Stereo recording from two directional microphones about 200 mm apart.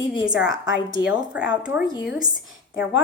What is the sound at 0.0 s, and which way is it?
Speech, 25° left (ahead or behind).